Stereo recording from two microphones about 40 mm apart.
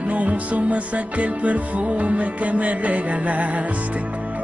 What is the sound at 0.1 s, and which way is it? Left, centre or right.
Music, right.